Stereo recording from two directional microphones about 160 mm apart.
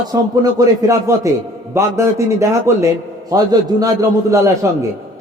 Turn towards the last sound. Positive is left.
turn(degrees=-20)  # may be behind; listen again after turning